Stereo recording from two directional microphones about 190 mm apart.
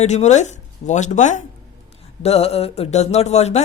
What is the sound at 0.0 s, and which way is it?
Speech, 35° left (ahead or behind).